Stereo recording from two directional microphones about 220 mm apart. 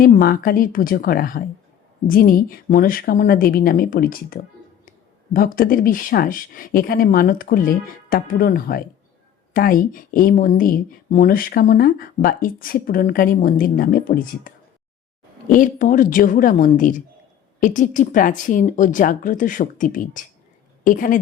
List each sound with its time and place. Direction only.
0.0 s speech: 40° left (ahead or behind)